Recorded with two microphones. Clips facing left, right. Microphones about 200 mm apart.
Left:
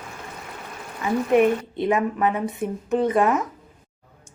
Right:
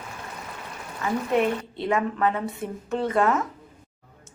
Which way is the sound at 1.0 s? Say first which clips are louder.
Left 5 dB; 15° left (ahead or behind).